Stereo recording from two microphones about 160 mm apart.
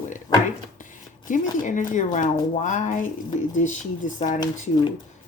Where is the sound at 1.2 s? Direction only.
55° left (ahead or behind).